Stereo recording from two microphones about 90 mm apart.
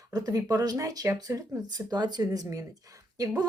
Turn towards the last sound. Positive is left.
turn(degrees=-45)  # may be behind; listen again after turning